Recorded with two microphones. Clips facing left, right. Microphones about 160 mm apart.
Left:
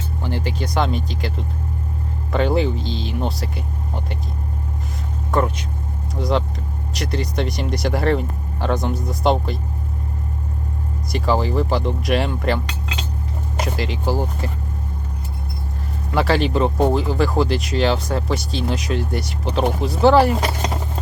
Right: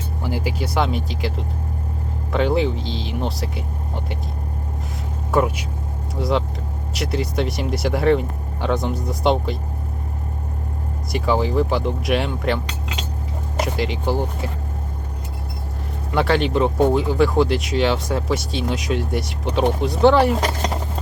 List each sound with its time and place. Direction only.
0.2 s speech: 10° right (ahead or behind)
2.3 s speech: centre (ahead or behind)
5.3 s speech: 10° right (ahead or behind)
11.1 s speech: centre (ahead or behind)
13.6 s speech: centre (ahead or behind)
16.1 s speech: centre (ahead or behind)